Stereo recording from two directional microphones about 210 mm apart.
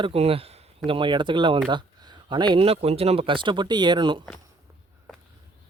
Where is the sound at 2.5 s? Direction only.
25° right (ahead or behind).